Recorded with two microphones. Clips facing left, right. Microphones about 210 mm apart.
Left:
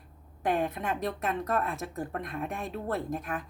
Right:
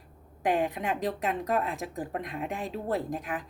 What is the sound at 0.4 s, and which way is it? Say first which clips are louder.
A woman's voice: right 2 dB; 15° right (ahead or behind).